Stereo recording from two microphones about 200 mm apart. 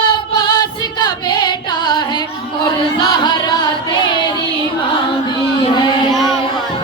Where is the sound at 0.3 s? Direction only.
20° left (ahead or behind).